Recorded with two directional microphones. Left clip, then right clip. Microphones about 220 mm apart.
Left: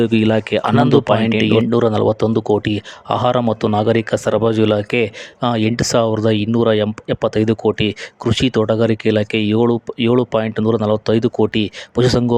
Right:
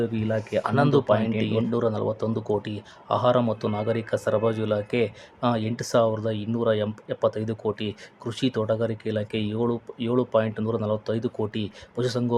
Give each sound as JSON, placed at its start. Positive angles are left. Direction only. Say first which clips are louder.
{"t": 0.0, "sound": "speech", "louder": "left 11 dB", "side_deg": 45}